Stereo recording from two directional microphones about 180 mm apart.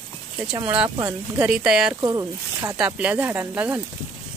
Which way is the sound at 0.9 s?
20° right (ahead or behind).